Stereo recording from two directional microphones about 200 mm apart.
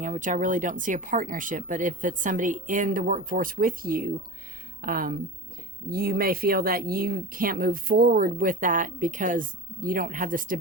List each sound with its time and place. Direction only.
0.0 s speech: 40° right (ahead or behind)